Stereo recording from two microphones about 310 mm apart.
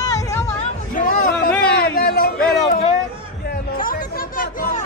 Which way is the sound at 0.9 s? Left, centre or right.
Left.